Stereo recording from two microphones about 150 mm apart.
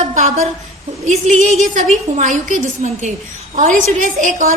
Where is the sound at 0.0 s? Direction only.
50° right (ahead or behind).